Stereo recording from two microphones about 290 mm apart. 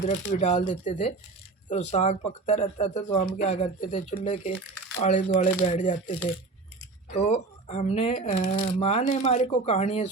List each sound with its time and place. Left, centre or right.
0.3 s speech: left
7.1 s speech: left